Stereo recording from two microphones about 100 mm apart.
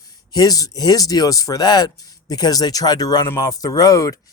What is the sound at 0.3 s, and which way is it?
Speech, 40° left (ahead or behind).